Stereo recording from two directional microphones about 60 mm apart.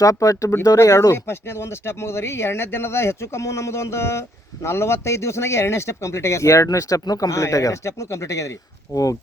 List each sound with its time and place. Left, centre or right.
0.0 s speech: left
1.1 s speech: left
8.9 s speech: left